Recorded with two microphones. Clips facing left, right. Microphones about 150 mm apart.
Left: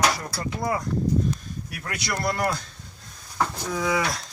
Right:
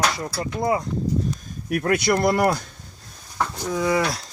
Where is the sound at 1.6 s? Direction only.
55° right (ahead or behind).